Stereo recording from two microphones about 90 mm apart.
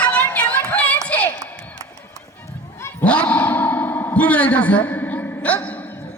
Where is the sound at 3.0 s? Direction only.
15° left (ahead or behind).